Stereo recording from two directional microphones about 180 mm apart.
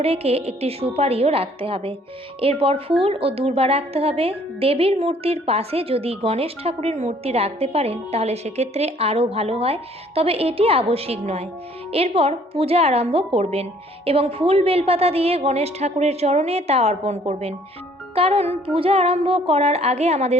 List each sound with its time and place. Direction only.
0.0 s a woman's voice: 35° right (ahead or behind)